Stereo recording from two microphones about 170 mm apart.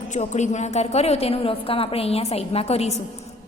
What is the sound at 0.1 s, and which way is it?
A woman's voice, 45° left (ahead or behind).